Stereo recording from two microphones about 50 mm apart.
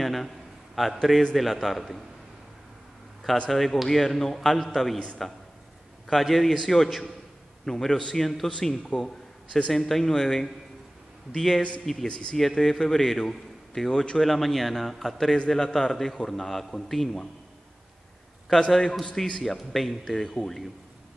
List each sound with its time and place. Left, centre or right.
0.0 s a sound: centre
0.8 s a man's voice: centre
3.4 s a man's voice: centre
6.0 s a man's voice: centre
12.1 s speech: centre
12.4 s a man's voice: centre
14.3 s a man's voice: centre
19.0 s a man's voice: centre
19.4 s a man's voice: centre